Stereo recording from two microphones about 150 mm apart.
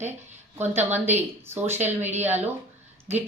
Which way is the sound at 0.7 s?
15° right (ahead or behind).